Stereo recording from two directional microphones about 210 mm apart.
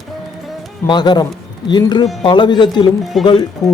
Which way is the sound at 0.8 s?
20° left (ahead or behind).